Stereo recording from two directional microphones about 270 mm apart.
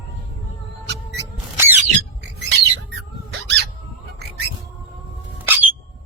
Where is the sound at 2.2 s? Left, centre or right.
Right.